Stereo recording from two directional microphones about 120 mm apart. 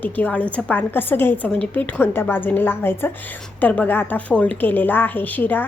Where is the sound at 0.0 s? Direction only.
10° left (ahead or behind).